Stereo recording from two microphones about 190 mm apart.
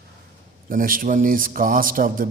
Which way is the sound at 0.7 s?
45° right (ahead or behind).